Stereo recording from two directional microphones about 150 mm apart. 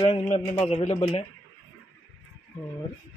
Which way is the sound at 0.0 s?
35° left (ahead or behind).